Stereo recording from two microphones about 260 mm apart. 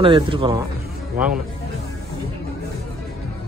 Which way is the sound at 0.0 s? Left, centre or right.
Centre.